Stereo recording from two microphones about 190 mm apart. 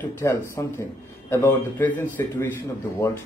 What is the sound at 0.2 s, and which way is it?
A man's voice, 15° left (ahead or behind).